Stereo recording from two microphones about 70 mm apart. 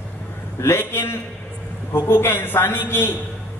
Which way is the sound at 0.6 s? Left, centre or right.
Left.